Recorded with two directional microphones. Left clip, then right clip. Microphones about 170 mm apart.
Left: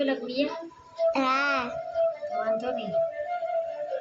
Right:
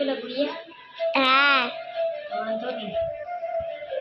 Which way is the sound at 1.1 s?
5° left (ahead or behind).